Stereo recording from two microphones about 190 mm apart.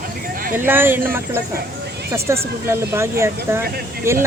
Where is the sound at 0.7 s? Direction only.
10° right (ahead or behind).